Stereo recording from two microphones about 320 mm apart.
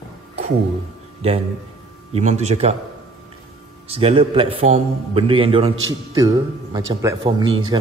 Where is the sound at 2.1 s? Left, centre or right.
Right.